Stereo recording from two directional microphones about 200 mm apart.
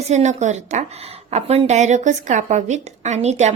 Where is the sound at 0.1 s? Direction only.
35° right (ahead or behind).